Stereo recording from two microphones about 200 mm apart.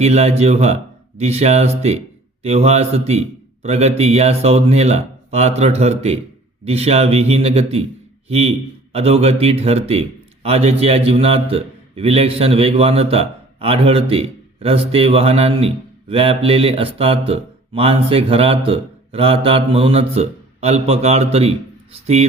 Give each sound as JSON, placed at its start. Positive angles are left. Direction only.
{"t": 0.0, "sound": "a man's voice", "side_deg": -30}